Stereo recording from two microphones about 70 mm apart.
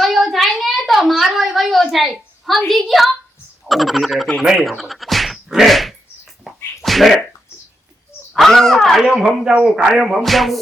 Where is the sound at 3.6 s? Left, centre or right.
Centre.